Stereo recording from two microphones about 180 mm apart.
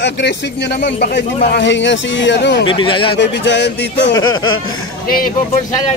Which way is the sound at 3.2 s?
75° left (ahead or behind).